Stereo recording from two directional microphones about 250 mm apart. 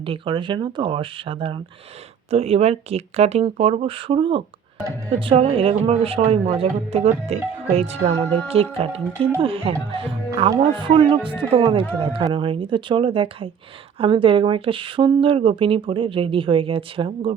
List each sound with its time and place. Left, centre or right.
0.0 s speech: right